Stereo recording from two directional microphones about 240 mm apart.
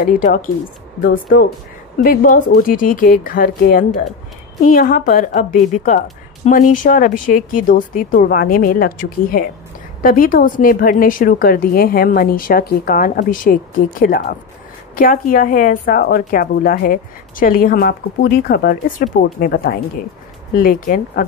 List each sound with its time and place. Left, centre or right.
0.0 s a woman's voice: left